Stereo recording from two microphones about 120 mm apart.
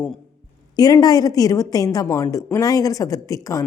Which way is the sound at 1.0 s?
30° left (ahead or behind).